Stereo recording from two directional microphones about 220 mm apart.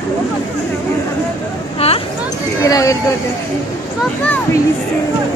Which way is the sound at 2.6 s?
15° left (ahead or behind).